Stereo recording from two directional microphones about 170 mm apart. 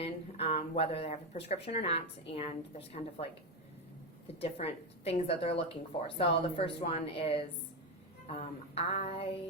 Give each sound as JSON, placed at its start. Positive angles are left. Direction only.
{"t": 0.0, "sound": "speech", "side_deg": 35}
{"t": 4.4, "sound": "speech", "side_deg": 35}